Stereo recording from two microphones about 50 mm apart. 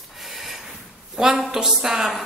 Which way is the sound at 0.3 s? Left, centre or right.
Centre.